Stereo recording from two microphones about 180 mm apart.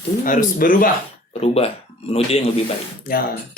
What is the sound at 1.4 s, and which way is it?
Speech, 35° left (ahead or behind).